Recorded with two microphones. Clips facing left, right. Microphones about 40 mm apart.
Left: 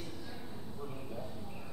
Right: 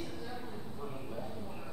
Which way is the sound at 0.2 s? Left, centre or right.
Centre.